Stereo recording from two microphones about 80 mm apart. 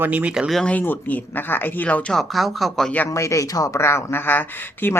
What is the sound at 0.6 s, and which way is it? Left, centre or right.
Speech, centre.